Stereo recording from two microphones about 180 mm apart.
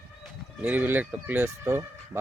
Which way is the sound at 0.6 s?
10° right (ahead or behind).